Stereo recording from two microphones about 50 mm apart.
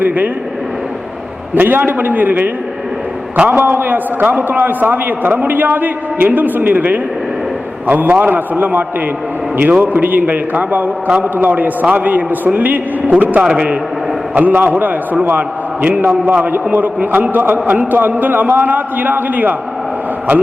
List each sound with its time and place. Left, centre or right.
1.5 s a man's voice: right
14.3 s a man's voice: right